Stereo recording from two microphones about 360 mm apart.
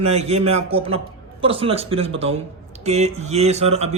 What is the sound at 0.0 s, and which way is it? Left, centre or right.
Speech, centre.